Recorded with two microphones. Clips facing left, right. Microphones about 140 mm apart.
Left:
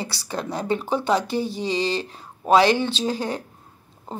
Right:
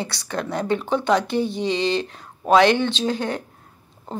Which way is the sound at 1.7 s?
35° left (ahead or behind).